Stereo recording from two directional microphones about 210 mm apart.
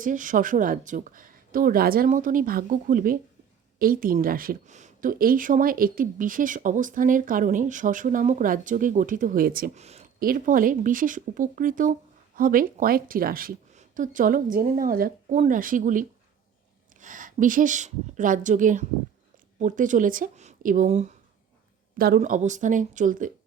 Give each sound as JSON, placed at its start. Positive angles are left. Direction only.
{"t": 0.0, "sound": "a woman's voice", "side_deg": -40}
{"t": 10.2, "sound": "a woman's voice", "side_deg": -40}
{"t": 21.9, "sound": "a woman's voice", "side_deg": -45}